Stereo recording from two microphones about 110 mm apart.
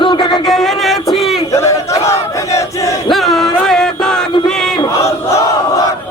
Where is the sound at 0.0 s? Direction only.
40° left (ahead or behind).